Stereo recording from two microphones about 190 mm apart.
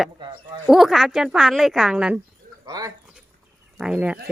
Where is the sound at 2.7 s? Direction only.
20° right (ahead or behind).